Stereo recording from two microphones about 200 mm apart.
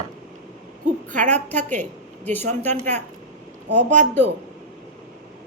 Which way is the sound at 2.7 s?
35° right (ahead or behind).